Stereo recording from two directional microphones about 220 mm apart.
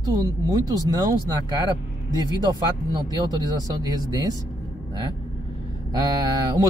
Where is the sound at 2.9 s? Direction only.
15° right (ahead or behind).